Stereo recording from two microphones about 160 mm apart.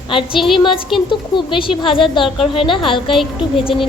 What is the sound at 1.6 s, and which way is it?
A woman's voice, 35° left (ahead or behind).